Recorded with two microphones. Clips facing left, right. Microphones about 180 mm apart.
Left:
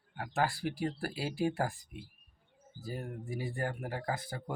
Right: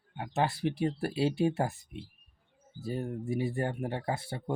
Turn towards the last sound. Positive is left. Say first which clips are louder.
# right 3 dB
turn(degrees=-30)  # may be behind; listen again after turning